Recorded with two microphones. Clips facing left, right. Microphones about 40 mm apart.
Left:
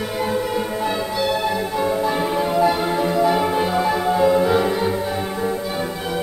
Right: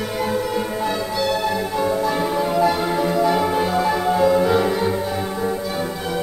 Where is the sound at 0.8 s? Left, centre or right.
Centre.